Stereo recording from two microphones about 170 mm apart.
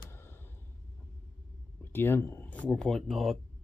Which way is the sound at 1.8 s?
10° left (ahead or behind).